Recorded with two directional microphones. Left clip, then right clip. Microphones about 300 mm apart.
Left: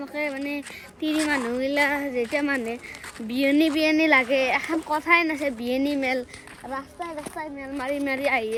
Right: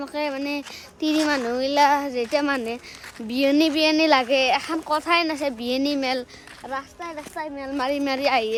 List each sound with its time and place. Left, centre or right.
0.0 s a child's voice: centre
7.8 s speech: centre